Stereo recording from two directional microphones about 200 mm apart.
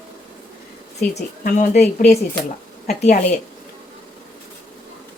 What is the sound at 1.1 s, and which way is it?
Speech, 35° left (ahead or behind).